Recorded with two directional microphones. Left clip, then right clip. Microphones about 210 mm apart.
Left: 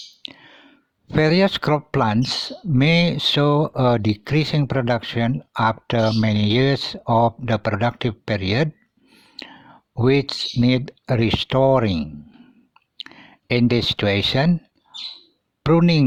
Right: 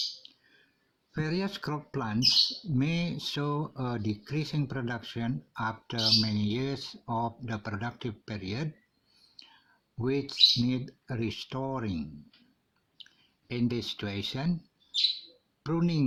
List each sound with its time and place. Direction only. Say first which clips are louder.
1.1 s speech: left 17 dB; 45° left (ahead or behind)
10.0 s speech: left 5 dB; 40° left (ahead or behind)
13.1 s speech: left 18 dB; 45° left (ahead or behind)
15.6 s speech: left 14 dB; 40° left (ahead or behind)